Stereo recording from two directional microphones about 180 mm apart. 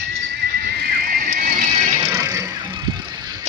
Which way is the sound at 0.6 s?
60° right (ahead or behind).